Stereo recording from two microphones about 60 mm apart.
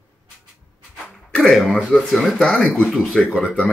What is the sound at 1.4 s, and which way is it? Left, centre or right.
Speech, centre.